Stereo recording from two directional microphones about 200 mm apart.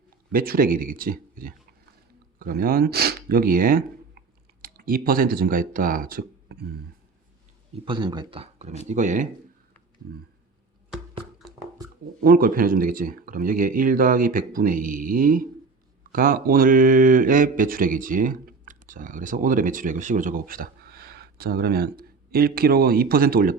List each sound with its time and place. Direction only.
0.3 s speech: 45° right (ahead or behind)
7.9 s speech: 25° right (ahead or behind)
10.0 s speech: 50° right (ahead or behind)
11.8 s a sound: 20° right (ahead or behind)
12.2 s speech: 45° right (ahead or behind)